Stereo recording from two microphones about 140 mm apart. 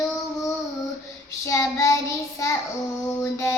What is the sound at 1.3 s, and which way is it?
Child singing, 20° left (ahead or behind).